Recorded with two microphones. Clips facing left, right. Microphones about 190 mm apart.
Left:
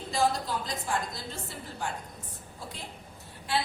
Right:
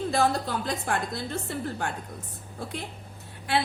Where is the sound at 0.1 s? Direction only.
60° right (ahead or behind).